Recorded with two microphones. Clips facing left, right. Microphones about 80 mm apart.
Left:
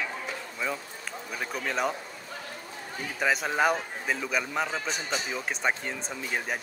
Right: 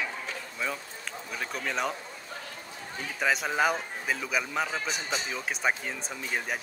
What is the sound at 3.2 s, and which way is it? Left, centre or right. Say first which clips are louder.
A man's voice: left 1 dB; centre.